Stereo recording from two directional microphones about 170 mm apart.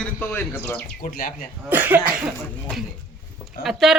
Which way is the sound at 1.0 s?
60° left (ahead or behind).